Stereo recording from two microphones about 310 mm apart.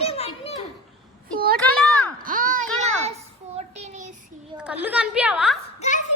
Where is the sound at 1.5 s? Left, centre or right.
Centre.